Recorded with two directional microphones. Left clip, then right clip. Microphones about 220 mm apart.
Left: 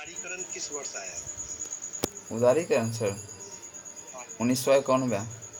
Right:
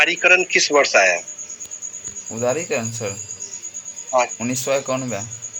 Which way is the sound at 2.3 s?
5° right (ahead or behind).